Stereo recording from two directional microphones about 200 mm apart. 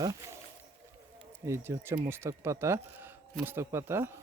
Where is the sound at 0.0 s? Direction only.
20° right (ahead or behind).